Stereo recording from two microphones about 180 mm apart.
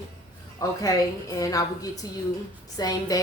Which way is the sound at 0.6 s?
20° left (ahead or behind).